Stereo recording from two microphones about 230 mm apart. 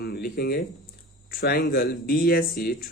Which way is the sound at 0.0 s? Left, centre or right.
Left.